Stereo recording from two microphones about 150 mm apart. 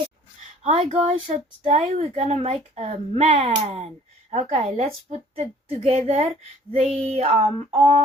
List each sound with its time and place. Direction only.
0.6 s speech: 40° right (ahead or behind)
1.3 s speech: 55° right (ahead or behind)